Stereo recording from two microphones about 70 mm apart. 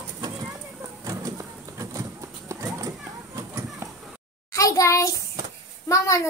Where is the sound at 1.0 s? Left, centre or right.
Right.